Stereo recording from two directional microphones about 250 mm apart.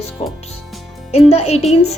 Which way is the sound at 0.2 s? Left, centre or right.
Left.